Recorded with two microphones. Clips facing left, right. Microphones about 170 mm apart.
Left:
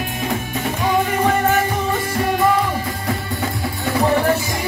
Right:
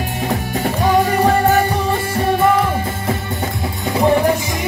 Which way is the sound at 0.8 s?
35° right (ahead or behind).